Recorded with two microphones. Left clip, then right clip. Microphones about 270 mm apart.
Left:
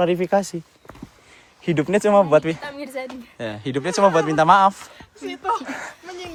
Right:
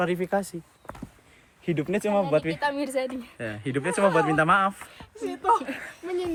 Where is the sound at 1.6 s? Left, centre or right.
Left.